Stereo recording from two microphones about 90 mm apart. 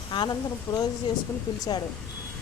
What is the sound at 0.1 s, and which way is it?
Speech, 55° left (ahead or behind).